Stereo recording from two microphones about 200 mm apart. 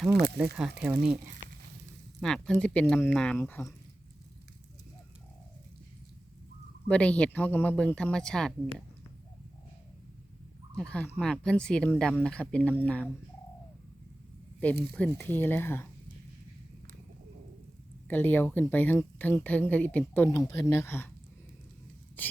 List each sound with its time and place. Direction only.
0.1 s speech: 55° right (ahead or behind)
0.8 s speech: 5° right (ahead or behind)
2.2 s speech: 5° left (ahead or behind)
6.8 s speech: 5° left (ahead or behind)
10.8 s speech: 5° left (ahead or behind)
14.9 s speech: 10° left (ahead or behind)
18.1 s speech: 10° left (ahead or behind)